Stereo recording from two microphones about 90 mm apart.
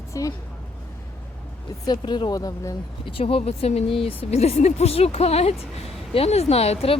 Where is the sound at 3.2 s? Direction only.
90° left.